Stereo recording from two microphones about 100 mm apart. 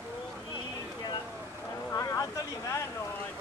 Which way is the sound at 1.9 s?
35° left (ahead or behind).